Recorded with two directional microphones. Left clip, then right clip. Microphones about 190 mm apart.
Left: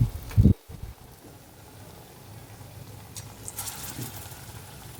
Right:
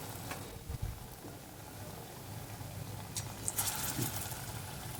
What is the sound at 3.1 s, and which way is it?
Vehicle, centre (ahead or behind).